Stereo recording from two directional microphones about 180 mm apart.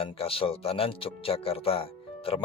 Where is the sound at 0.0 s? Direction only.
30° left (ahead or behind).